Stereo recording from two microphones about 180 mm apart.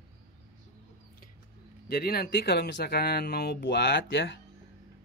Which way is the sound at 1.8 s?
60° left (ahead or behind).